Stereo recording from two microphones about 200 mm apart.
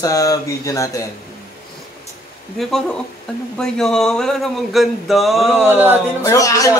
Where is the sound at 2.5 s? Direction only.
Centre (ahead or behind).